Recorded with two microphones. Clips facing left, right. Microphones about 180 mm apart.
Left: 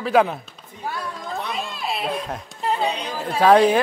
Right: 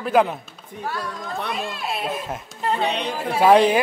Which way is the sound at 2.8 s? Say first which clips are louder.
Right 1 dB; 65° right (ahead or behind).